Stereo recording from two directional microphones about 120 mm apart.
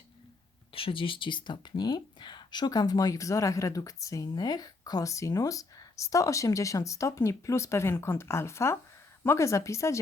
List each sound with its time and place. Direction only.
0.7 s speech: 50° left (ahead or behind); by 10.0 s 25° left (ahead or behind)